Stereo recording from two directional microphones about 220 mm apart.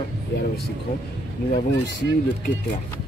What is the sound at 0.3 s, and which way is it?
Speech, 50° left (ahead or behind).